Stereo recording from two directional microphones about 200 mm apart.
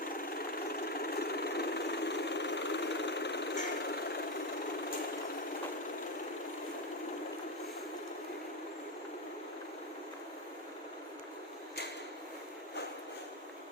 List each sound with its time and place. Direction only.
0.2 s engine: 50° left (ahead or behind)